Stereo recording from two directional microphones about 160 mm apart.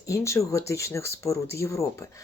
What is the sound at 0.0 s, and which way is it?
Speech, 20° left (ahead or behind).